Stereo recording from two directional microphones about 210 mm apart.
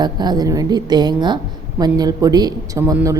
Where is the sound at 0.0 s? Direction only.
20° right (ahead or behind).